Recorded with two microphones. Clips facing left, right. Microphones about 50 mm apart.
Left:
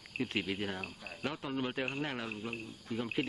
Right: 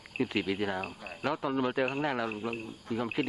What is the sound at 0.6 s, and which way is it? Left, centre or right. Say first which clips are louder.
Cricket: right 6 dB; centre.